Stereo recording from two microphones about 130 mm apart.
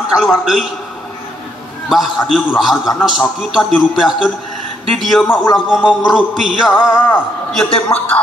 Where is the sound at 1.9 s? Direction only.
Centre (ahead or behind).